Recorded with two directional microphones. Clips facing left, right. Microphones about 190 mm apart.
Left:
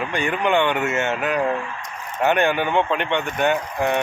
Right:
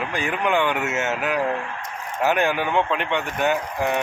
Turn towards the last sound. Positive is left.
turn(degrees=0)  # may be behind; listen again after turning